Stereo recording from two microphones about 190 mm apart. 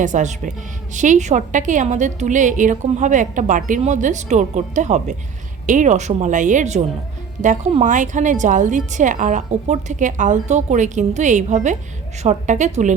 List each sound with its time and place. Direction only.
0.0 s a woman's voice: 40° right (ahead or behind)